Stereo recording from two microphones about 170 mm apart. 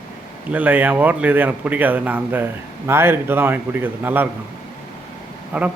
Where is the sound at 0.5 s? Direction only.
10° right (ahead or behind).